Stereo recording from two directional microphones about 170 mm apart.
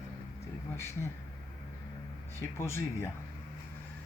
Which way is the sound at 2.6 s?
15° left (ahead or behind).